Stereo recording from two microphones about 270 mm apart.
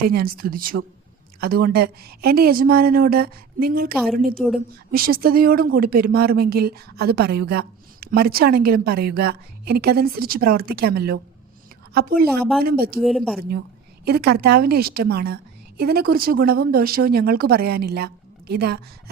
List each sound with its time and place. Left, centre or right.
0.0 s speech: right
3.9 s a woman's voice: centre
4.2 s speech: right
13.0 s a woman's voice: centre
14.0 s speech: right